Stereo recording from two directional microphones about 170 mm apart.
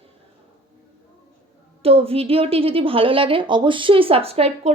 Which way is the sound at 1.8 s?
35° right (ahead or behind).